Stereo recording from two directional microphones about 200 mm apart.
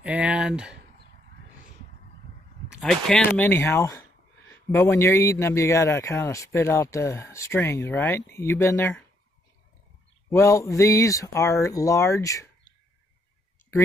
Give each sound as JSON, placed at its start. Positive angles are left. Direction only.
{"t": 0.0, "sound": "speech", "side_deg": -5}
{"t": 2.7, "sound": "a man's voice", "side_deg": 0}
{"t": 10.3, "sound": "a man's voice", "side_deg": 15}